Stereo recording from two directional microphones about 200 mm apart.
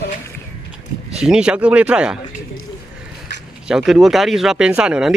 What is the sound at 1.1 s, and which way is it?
Speech, 5° right (ahead or behind).